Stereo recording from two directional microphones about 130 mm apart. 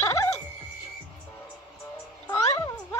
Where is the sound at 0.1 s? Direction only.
25° left (ahead or behind).